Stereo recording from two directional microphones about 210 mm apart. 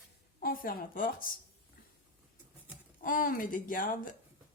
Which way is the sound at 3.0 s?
40° left (ahead or behind).